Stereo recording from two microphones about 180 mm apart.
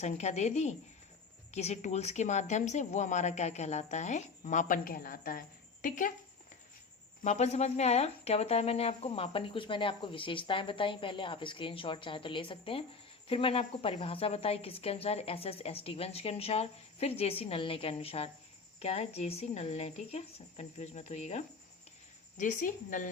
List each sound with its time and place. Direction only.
0.0 s a woman's voice: 40° left (ahead or behind)
7.3 s a woman's voice: 35° left (ahead or behind)